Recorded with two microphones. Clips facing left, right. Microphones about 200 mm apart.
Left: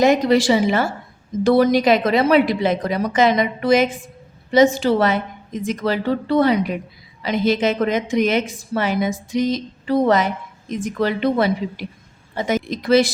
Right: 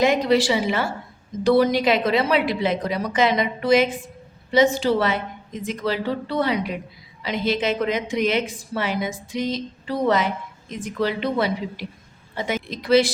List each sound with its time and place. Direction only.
0.0 s a woman's voice: 45° left (ahead or behind)